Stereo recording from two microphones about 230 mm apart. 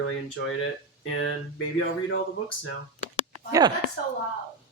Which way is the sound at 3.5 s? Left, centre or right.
Centre.